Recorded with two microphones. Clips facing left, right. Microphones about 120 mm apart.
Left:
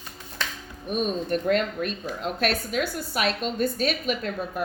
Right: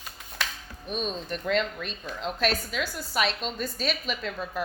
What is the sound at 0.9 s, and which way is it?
A woman's voice, 50° left (ahead or behind).